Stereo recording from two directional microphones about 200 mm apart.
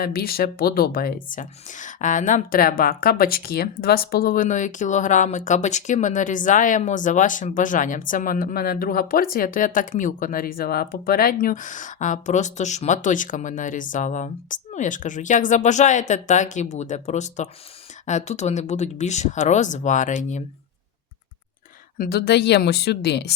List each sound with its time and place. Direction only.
0.0 s a woman's voice: 50° left (ahead or behind)
21.9 s a woman's voice: 45° left (ahead or behind)